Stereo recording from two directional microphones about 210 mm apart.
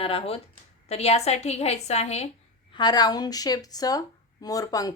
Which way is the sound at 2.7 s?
20° left (ahead or behind).